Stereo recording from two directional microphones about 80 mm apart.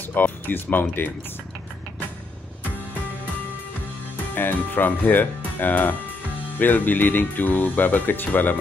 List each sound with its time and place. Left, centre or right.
0.1 s speech: left
4.4 s speech: left